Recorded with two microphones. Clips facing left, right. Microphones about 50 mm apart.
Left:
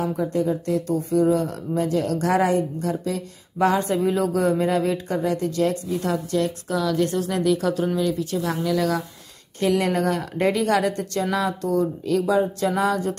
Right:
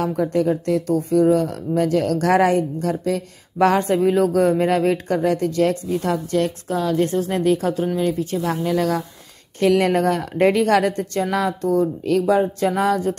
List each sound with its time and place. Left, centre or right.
0.0 s speech: right
0.5 s speech: right
6.7 s speech: right
11.0 s speech: right